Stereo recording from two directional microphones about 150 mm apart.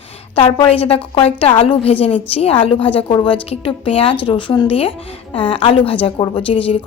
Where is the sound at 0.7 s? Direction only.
40° left (ahead or behind).